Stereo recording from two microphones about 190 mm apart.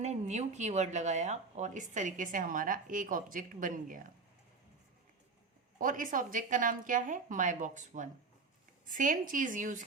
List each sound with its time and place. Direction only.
0.0 s speech: 35° right (ahead or behind)
5.8 s a woman's voice: 45° right (ahead or behind)